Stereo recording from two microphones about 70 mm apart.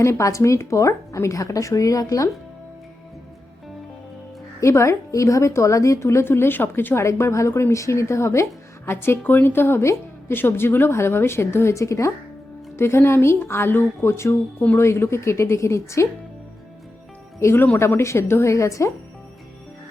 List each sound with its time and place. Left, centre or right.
0.0 s a woman's voice: left
4.6 s a woman's voice: left
17.4 s a woman's voice: left